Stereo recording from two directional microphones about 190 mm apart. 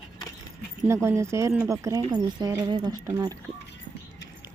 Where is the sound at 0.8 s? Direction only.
15° right (ahead or behind).